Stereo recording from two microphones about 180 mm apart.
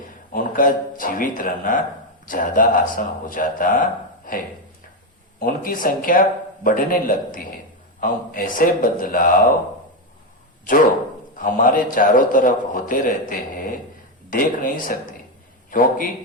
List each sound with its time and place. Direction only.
0.3 s a man's voice: 50° left (ahead or behind)
5.4 s a man's voice: 50° left (ahead or behind)
11.3 s a man's voice: 50° left (ahead or behind)